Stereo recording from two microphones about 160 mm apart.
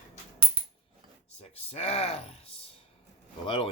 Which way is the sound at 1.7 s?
40° left (ahead or behind).